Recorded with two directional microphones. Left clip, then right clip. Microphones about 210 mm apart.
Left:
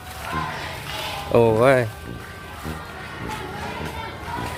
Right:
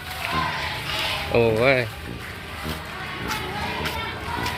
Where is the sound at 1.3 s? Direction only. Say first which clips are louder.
Left 4 dB; 30° left (ahead or behind).